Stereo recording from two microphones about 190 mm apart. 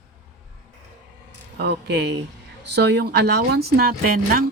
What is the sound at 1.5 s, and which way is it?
Speech, 60° right (ahead or behind).